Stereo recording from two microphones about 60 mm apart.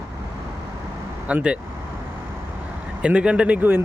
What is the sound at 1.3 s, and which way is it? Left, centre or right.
Speech, right.